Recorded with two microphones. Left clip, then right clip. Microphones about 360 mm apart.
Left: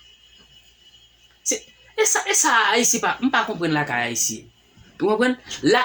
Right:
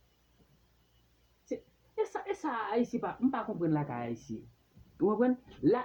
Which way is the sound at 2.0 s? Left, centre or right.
Right.